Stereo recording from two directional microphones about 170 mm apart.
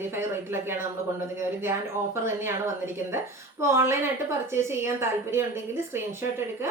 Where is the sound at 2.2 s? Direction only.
15° right (ahead or behind).